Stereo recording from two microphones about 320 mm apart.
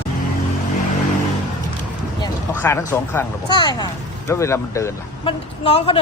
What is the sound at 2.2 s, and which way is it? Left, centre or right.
Speech, centre.